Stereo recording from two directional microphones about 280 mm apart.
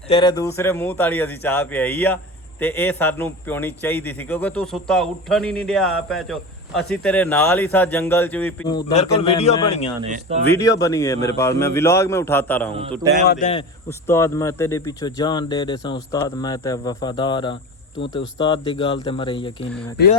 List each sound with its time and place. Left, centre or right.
0.1 s a man's voice: centre
10.0 s a man's voice: right
10.6 s a man's voice: centre
12.7 s a man's voice: centre
13.2 s a man's voice: left
14.1 s a man's voice: centre